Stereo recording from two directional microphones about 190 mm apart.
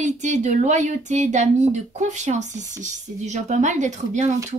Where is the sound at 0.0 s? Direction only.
40° right (ahead or behind).